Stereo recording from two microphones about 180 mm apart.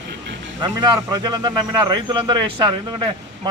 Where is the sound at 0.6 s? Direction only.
25° right (ahead or behind).